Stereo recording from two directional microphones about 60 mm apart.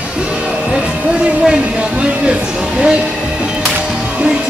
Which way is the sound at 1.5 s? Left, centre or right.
Centre.